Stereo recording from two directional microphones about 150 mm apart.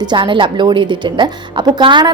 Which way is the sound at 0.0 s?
30° right (ahead or behind).